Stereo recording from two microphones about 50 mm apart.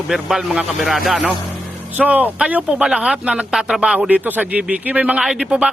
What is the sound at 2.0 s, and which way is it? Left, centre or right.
Speech, right.